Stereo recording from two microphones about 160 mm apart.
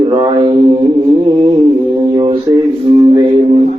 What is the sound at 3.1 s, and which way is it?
Music, 35° right (ahead or behind).